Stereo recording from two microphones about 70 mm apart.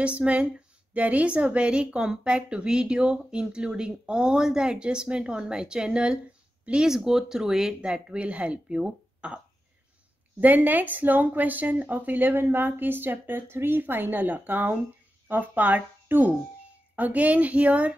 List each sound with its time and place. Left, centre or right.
0.0 s a woman's voice: centre
10.4 s a woman's voice: right